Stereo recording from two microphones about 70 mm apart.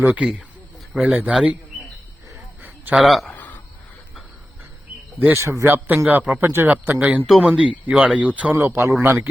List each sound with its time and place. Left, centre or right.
0.2 s speech: centre
2.6 s a sound: right
2.9 s speech: centre
5.3 s speech: right
8.6 s speech: right